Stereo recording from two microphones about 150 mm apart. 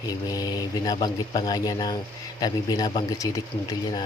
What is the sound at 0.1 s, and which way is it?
Speech, 25° left (ahead or behind).